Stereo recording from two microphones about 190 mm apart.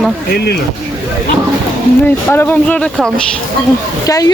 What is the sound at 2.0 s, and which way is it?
Speech, 10° left (ahead or behind).